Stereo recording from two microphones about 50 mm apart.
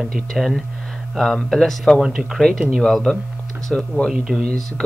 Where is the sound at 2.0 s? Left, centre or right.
Centre.